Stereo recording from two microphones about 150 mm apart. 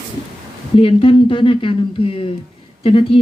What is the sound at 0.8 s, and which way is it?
Speech, 35° left (ahead or behind).